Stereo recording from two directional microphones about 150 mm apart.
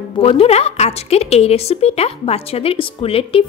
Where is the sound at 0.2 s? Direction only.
40° left (ahead or behind).